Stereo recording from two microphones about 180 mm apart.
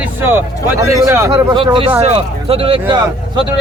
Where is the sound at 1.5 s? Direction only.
30° right (ahead or behind).